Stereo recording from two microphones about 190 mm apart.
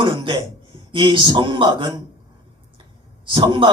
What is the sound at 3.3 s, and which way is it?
Speech, 25° right (ahead or behind).